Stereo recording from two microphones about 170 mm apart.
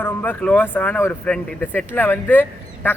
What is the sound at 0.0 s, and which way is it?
Speech, 10° left (ahead or behind).